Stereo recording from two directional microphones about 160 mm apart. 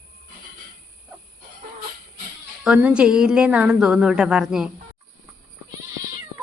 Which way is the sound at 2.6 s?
5° right (ahead or behind).